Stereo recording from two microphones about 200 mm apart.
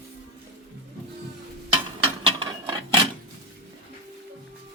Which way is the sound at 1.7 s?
25° right (ahead or behind).